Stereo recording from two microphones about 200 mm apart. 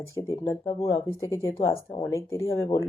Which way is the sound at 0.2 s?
15° left (ahead or behind).